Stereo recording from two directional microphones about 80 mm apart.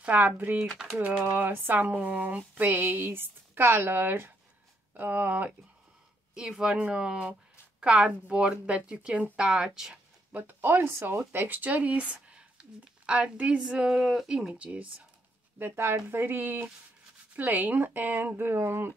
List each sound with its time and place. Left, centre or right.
0.0 s speech: right
0.7 s speech: centre
0.9 s speech: right
6.3 s speech: centre
10.3 s speech: right
15.6 s speech: right